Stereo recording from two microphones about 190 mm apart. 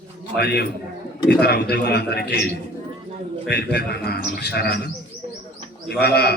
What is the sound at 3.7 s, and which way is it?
A man's voice, 55° left (ahead or behind).